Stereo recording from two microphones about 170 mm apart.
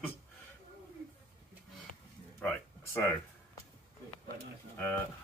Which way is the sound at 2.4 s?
10° left (ahead or behind).